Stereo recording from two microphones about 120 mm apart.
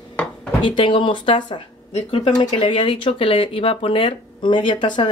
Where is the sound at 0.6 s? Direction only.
45° left (ahead or behind).